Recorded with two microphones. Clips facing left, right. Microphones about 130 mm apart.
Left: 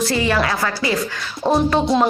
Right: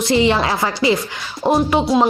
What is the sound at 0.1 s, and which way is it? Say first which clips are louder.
Speech: right 3 dB; 20° right (ahead or behind).